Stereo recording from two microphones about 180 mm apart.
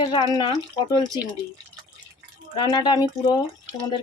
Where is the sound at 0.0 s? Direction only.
30° left (ahead or behind).